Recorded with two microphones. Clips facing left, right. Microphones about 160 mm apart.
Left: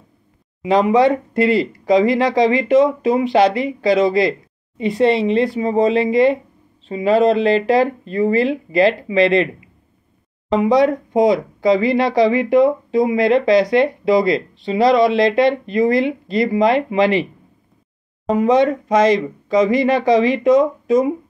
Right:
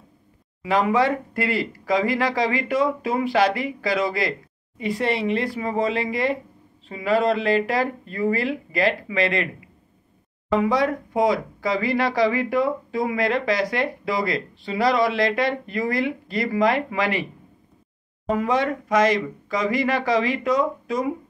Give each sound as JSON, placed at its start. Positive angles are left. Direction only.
{"t": 0.6, "sound": "speech", "side_deg": 20}
{"t": 10.5, "sound": "speech", "side_deg": 20}
{"t": 18.3, "sound": "speech", "side_deg": 20}